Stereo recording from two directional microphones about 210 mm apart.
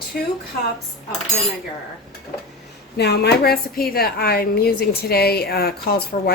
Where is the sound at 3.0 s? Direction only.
50° left (ahead or behind).